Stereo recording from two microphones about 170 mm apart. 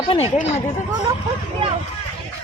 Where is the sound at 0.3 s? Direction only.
40° left (ahead or behind).